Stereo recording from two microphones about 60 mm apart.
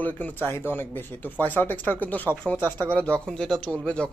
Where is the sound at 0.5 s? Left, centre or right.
Left.